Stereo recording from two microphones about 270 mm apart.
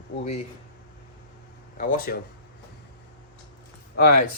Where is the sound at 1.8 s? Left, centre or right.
Left.